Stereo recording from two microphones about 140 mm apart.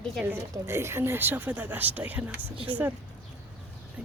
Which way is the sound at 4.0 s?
10° right (ahead or behind).